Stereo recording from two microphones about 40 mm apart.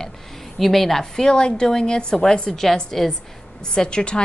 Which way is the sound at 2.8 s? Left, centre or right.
Centre.